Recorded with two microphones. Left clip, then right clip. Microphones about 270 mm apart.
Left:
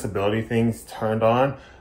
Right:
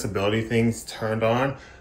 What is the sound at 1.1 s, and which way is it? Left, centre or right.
Speech, centre.